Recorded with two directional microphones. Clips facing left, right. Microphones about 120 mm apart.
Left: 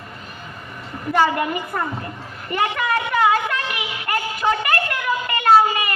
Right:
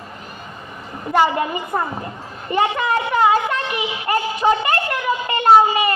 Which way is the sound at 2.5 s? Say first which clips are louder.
Right 3 dB; 25° right (ahead or behind).